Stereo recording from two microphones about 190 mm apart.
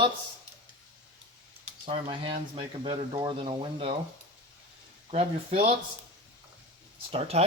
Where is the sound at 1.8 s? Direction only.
30° right (ahead or behind).